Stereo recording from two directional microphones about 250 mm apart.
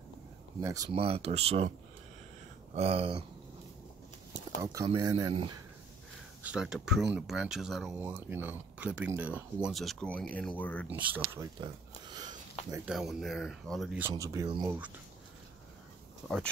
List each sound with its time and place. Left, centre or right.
0.6 s speech: centre
0.9 s speech: right
2.7 s speech: right
4.6 s speech: centre
6.4 s speech: centre
10.9 s speech: centre
11.6 s a sound: centre
12.7 s speech: centre